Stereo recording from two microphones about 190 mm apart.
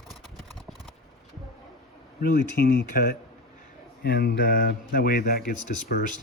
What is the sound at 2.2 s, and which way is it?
Speech, 50° left (ahead or behind).